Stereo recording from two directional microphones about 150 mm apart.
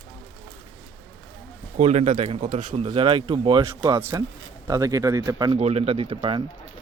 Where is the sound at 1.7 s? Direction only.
50° right (ahead or behind); by 3.6 s 35° right (ahead or behind).